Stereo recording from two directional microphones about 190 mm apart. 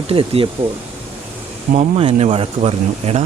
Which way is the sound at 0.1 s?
30° right (ahead or behind).